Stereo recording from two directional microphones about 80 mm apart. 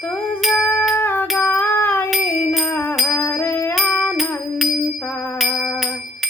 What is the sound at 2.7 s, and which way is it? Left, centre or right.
Music, left.